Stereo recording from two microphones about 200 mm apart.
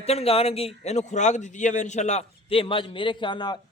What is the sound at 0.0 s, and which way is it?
A man's voice, 30° left (ahead or behind).